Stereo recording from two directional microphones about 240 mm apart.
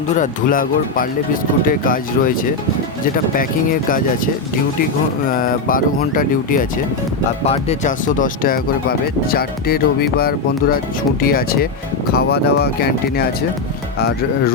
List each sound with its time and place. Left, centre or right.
0.2 s speech: left
5.3 s speech: left